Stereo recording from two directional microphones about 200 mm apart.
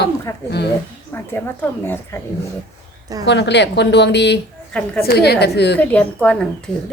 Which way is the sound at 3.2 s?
60° left (ahead or behind).